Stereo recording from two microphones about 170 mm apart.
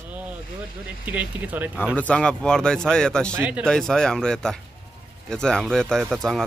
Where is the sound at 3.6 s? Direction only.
5° left (ahead or behind).